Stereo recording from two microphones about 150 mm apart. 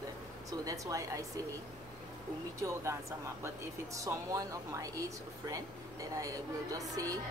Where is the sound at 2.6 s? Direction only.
20° right (ahead or behind).